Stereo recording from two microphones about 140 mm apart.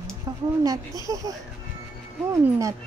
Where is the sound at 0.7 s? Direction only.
25° right (ahead or behind).